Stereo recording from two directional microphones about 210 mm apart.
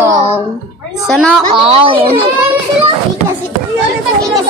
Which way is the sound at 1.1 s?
Centre (ahead or behind).